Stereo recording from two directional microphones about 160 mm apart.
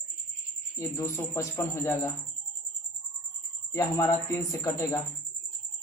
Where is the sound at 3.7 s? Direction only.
20° left (ahead or behind).